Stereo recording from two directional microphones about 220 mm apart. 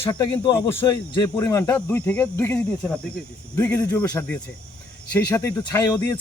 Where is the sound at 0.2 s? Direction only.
20° left (ahead or behind).